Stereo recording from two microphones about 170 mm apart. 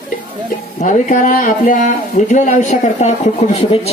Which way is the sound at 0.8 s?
50° left (ahead or behind).